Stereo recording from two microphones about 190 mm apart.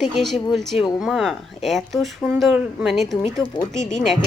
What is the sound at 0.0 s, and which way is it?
A woman's voice, centre (ahead or behind).